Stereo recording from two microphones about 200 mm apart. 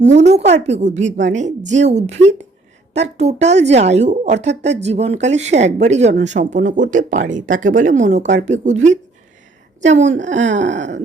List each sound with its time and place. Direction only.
0.0 s speech: 35° right (ahead or behind)